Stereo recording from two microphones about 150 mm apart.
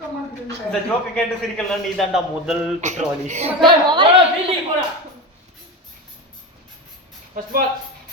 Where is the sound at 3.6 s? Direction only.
30° right (ahead or behind).